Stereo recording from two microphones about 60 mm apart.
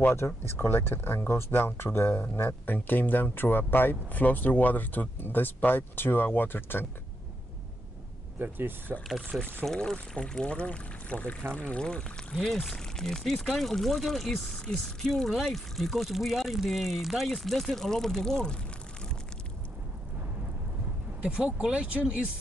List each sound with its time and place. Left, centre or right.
0.1 s speech: left
8.4 s speech: right
9.7 s speech: centre
12.4 s speech: centre
21.2 s speech: centre